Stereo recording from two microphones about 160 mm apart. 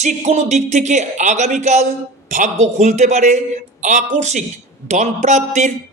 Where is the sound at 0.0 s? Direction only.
45° right (ahead or behind).